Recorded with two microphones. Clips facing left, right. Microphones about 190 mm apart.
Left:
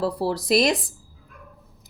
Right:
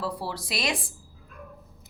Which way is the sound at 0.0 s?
40° left (ahead or behind).